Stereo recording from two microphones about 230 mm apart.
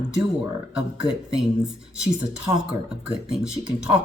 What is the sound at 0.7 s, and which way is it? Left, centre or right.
Speech, centre.